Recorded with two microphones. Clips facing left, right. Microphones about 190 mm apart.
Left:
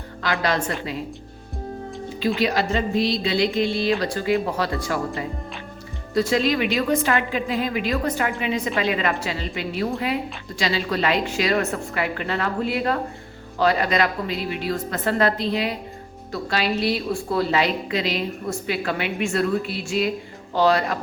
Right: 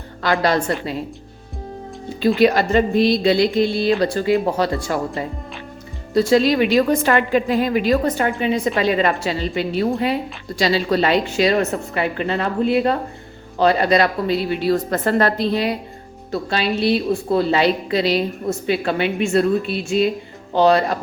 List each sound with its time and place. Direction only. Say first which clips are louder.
0.2 s a woman's voice: right 5 dB; 35° right (ahead or behind)
2.2 s a woman's voice: right 7 dB; 55° right (ahead or behind)
16.3 s a woman's voice: right 3 dB; 25° right (ahead or behind)